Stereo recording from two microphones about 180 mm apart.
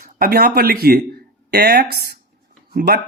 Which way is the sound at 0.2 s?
55° right (ahead or behind).